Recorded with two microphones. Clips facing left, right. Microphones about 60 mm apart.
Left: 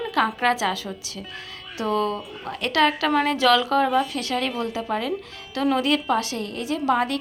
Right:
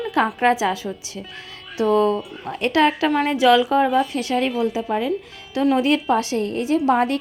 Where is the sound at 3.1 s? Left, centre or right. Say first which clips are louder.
Right 4 dB; centre.